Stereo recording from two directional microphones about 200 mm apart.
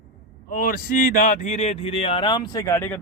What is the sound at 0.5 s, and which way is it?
Speech, 45° left (ahead or behind).